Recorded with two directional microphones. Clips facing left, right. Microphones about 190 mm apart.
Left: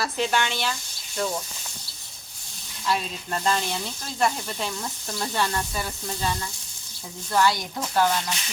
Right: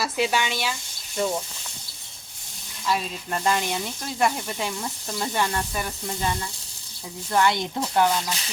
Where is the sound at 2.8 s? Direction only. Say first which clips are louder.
Right 1 dB; 5° right (ahead or behind); by 8.0 s 20° right (ahead or behind).